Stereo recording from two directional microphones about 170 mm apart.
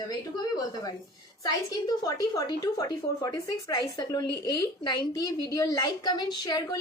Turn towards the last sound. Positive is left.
turn(degrees=25)  # may be behind; listen again after turning